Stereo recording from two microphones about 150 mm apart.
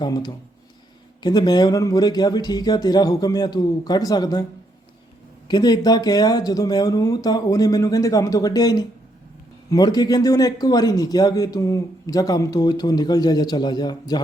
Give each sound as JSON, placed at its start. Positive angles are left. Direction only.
{"t": 0.0, "sound": "a man's voice", "side_deg": 30}
{"t": 5.5, "sound": "a man's voice", "side_deg": 25}